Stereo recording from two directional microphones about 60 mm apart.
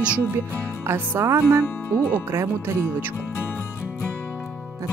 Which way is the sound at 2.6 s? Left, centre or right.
Right.